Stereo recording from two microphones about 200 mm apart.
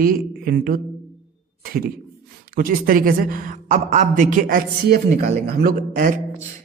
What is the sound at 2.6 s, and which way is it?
A woman's voice, 45° right (ahead or behind).